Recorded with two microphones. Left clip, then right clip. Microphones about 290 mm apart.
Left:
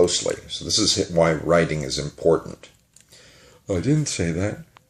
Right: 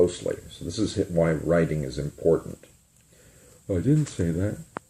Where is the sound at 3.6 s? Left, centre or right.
Left.